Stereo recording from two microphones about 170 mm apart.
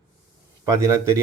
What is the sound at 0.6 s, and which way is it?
Speech, 20° right (ahead or behind).